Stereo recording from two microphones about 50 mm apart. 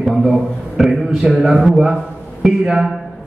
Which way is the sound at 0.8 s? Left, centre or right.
Centre.